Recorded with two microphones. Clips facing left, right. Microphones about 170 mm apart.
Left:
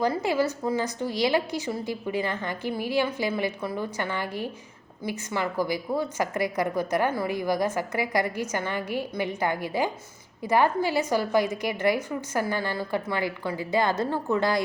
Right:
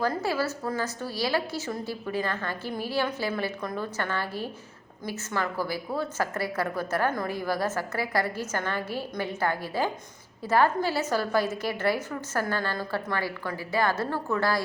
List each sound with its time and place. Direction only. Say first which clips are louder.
0.0 s a woman's voice: left 3 dB; 15° left (ahead or behind)